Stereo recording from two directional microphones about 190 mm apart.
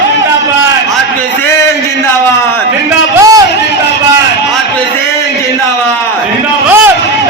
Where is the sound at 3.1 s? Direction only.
20° right (ahead or behind).